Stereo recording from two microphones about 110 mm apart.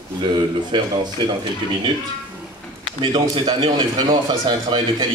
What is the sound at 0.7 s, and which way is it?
Speech, 50° right (ahead or behind).